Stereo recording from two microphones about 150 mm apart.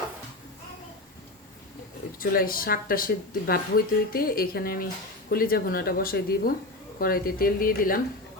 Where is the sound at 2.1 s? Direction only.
75° left (ahead or behind).